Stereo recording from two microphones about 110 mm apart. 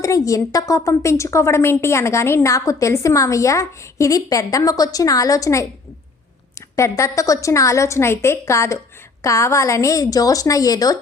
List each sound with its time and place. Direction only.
0.0 s a woman's voice: 30° left (ahead or behind)
6.7 s a woman's voice: 30° left (ahead or behind)